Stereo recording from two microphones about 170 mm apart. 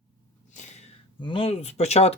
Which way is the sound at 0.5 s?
40° left (ahead or behind).